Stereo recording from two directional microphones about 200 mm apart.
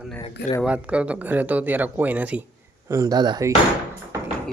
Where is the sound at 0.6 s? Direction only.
5° right (ahead or behind).